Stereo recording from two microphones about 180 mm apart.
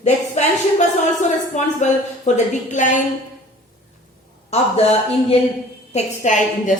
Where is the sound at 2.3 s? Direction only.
40° left (ahead or behind).